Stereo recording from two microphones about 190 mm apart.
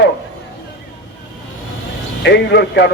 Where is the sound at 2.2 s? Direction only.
65° left (ahead or behind).